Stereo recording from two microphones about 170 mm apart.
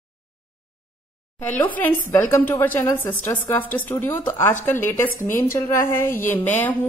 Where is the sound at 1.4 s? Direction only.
10° left (ahead or behind).